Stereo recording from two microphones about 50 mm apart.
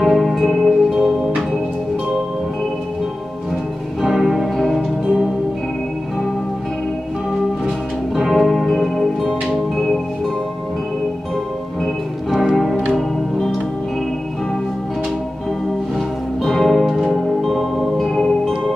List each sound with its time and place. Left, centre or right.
0.0 s music: centre
4.0 s music: centre
4.6 s music: centre
5.0 s music: centre
8.2 s music: centre
11.8 s music: centre
16.4 s music: centre
16.9 s music: centre